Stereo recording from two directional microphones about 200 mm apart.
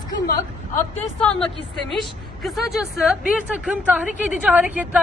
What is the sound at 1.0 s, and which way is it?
A woman's voice, 5° left (ahead or behind).